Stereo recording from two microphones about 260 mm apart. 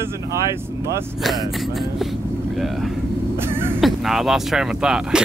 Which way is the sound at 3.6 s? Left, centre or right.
Centre.